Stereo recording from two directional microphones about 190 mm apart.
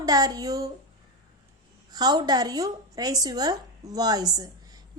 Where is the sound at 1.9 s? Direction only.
20° right (ahead or behind).